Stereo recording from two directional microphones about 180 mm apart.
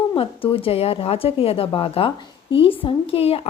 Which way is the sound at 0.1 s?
30° left (ahead or behind).